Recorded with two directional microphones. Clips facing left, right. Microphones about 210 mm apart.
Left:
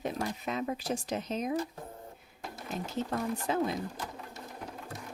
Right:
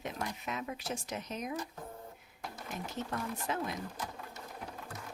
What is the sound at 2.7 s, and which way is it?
Speech, 30° left (ahead or behind).